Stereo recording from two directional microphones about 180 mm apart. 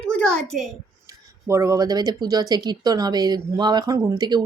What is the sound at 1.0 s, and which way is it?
Speech, 15° right (ahead or behind).